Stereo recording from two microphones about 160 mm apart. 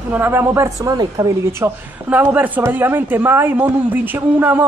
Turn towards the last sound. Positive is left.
turn(degrees=-10)  # may be behind; listen again after turning